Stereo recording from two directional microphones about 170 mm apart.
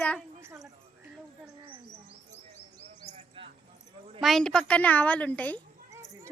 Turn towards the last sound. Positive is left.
turn(degrees=10)  # may be behind; listen again after turning